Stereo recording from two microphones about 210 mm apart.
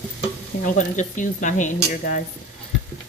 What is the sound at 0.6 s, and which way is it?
Speech, 35° left (ahead or behind).